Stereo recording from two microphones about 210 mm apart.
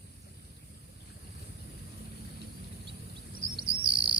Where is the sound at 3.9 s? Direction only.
25° right (ahead or behind).